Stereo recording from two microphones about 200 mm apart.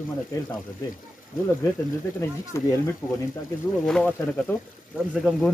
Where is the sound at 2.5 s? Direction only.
15° left (ahead or behind).